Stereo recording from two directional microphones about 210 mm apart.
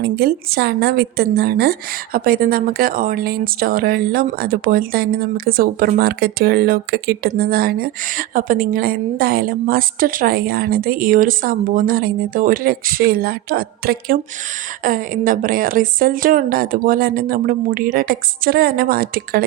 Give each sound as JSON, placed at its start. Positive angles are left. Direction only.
{"t": 0.0, "sound": "speech", "side_deg": -50}